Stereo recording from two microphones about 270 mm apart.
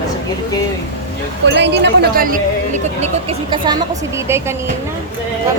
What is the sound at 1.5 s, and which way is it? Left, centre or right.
Speech, right.